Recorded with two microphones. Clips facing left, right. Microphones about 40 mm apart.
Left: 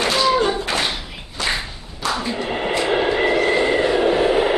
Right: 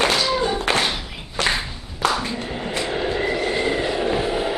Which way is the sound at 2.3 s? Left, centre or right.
Left.